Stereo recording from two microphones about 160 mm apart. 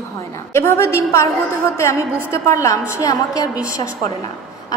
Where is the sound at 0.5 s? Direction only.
15° left (ahead or behind).